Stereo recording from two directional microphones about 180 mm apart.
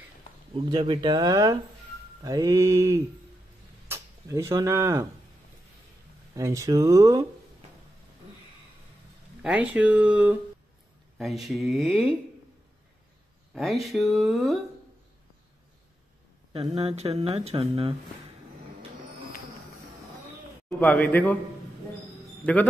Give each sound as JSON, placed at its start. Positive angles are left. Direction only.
{"t": 0.7, "sound": "speech", "side_deg": -25}
{"t": 6.3, "sound": "speech", "side_deg": -15}
{"t": 9.4, "sound": "speech", "side_deg": -5}
{"t": 13.5, "sound": "speech", "side_deg": 0}
{"t": 16.8, "sound": "speech", "side_deg": -35}
{"t": 20.8, "sound": "a man's voice", "side_deg": 10}
{"t": 22.4, "sound": "speech", "side_deg": 10}